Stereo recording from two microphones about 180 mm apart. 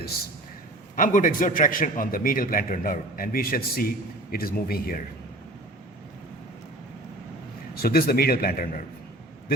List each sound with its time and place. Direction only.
0.9 s a man's voice: 45° left (ahead or behind)
7.8 s a man's voice: 55° left (ahead or behind)